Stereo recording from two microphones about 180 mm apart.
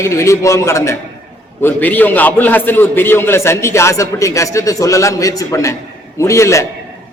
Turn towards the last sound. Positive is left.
turn(degrees=15)  # may be behind; listen again after turning